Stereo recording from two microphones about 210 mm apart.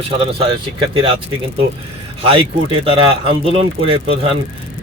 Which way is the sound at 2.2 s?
25° right (ahead or behind).